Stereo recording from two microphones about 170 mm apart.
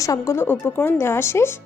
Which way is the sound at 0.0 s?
20° left (ahead or behind).